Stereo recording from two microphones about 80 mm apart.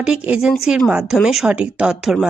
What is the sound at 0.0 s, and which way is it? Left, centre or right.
Speech, centre.